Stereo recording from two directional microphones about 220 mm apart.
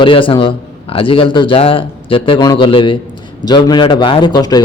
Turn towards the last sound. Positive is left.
turn(degrees=20)  # may be behind; listen again after turning